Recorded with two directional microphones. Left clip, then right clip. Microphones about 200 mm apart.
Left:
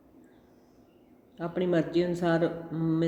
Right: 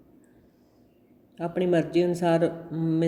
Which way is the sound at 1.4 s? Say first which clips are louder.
Right 3 dB; 25° right (ahead or behind).